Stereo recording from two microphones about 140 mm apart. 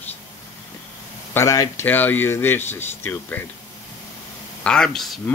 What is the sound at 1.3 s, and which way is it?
Speech, 20° left (ahead or behind).